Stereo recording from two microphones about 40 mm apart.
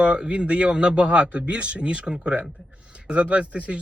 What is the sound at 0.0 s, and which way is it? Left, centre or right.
A man's voice, right.